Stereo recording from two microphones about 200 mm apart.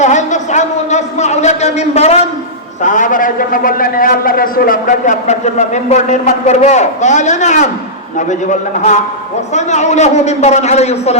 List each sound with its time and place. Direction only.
0.0 s a man's voice: 35° left (ahead or behind)